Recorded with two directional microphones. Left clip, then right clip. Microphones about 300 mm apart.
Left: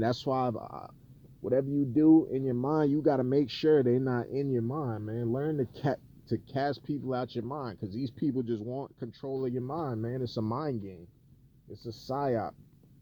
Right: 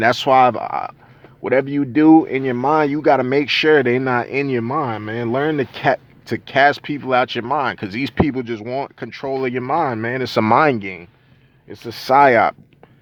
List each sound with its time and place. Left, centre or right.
0.0 s speech: centre
0.5 s speech: right
1.5 s speech: centre
2.8 s speech: centre
4.4 s speech: centre
5.7 s speech: centre
7.4 s speech: right
8.3 s speech: centre
8.5 s speech: right
9.0 s speech: centre
9.6 s speech: right